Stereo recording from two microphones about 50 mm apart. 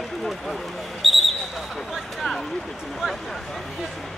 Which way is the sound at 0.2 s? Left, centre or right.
Centre.